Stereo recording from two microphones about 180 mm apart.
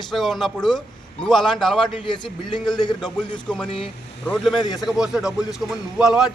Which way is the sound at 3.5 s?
5° left (ahead or behind).